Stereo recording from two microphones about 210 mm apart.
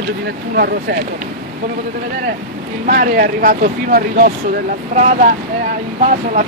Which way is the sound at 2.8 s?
40° right (ahead or behind).